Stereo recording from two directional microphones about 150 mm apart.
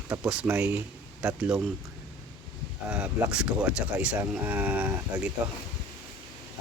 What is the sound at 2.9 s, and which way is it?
Speech, 5° right (ahead or behind).